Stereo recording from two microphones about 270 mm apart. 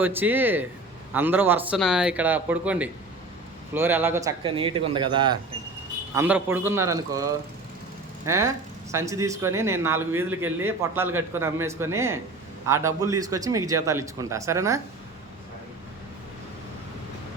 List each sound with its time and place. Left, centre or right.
0.0 s speech: centre
6.1 s speech: centre